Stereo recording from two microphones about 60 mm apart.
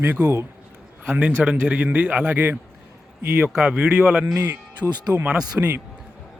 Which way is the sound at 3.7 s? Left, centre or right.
Right.